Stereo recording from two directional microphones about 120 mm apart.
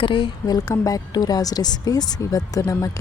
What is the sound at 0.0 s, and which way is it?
Speech, 45° left (ahead or behind).